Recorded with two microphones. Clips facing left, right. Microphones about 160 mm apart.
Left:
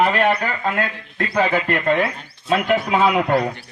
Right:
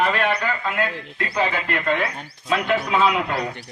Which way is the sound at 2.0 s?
25° left (ahead or behind).